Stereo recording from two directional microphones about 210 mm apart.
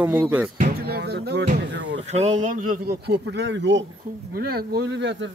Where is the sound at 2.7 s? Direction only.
45° right (ahead or behind).